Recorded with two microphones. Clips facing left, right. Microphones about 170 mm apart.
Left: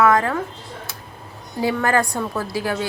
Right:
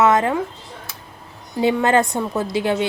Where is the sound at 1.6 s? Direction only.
20° right (ahead or behind).